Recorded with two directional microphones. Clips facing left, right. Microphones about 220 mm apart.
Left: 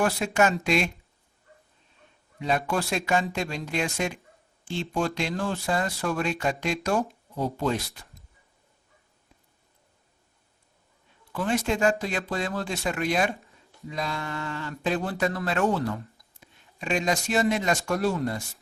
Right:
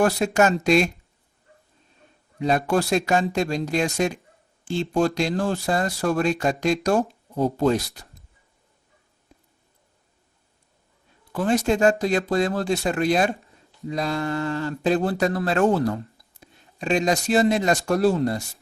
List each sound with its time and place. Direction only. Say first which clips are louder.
0.0 s speech: right 4 dB; 40° right (ahead or behind)
2.4 s speech: right 5 dB; 40° right (ahead or behind)
11.3 s speech: right 5 dB; 40° right (ahead or behind)